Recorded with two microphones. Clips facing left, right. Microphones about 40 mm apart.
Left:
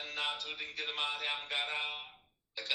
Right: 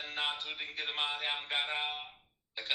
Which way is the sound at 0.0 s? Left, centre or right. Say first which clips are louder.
Right 1 dB; right.